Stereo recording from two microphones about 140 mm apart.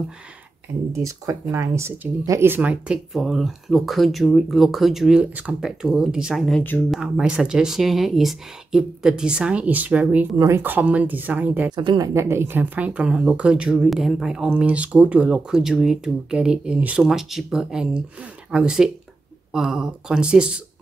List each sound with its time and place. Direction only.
0.9 s speech: 20° right (ahead or behind)
10.3 s speech: 20° right (ahead or behind)
11.7 s a woman's voice: 30° right (ahead or behind)
12.1 s speech: 20° right (ahead or behind)